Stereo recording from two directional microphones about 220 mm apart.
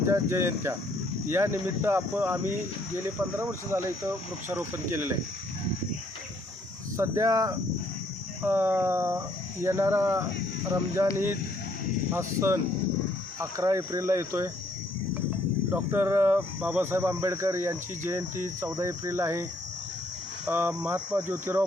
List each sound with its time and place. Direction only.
0.1 s speech: 10° right (ahead or behind)
6.9 s speech: 15° right (ahead or behind)
15.7 s speech: 10° right (ahead or behind)
20.5 s speech: 10° right (ahead or behind)